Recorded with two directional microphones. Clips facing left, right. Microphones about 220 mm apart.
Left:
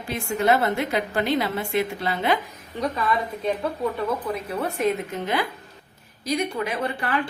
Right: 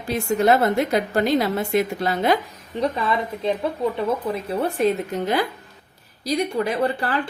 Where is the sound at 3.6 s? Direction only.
25° right (ahead or behind).